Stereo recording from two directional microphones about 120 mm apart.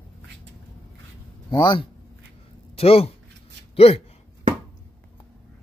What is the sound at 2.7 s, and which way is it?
Speech, 55° left (ahead or behind).